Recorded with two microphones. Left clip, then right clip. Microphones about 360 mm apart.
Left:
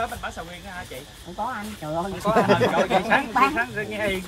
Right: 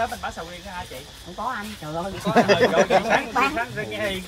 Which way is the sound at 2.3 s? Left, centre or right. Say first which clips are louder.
Right 2 dB; right.